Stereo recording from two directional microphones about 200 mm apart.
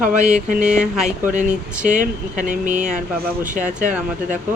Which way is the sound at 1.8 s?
40° right (ahead or behind).